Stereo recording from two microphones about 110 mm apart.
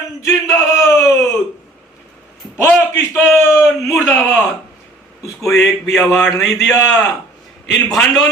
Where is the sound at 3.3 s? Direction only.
5° right (ahead or behind).